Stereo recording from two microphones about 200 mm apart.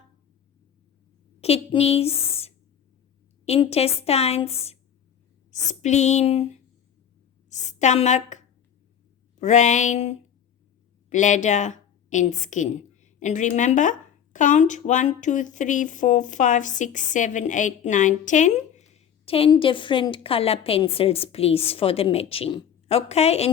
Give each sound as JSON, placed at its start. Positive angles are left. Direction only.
{"t": 1.4, "sound": "a woman's voice", "side_deg": 30}
{"t": 7.5, "sound": "a woman's voice", "side_deg": 35}